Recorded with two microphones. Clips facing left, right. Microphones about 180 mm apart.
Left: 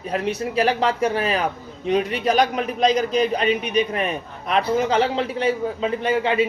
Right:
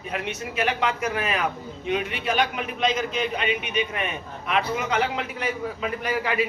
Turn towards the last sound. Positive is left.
turn(degrees=25)  # may be behind; listen again after turning